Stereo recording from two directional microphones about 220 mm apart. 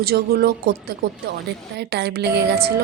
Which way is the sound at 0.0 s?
45° right (ahead or behind).